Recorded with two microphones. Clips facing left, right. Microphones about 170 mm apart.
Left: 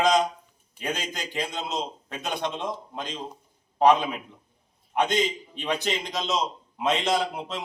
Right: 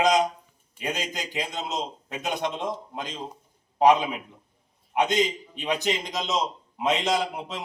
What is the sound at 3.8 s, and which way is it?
A man's voice, 10° right (ahead or behind).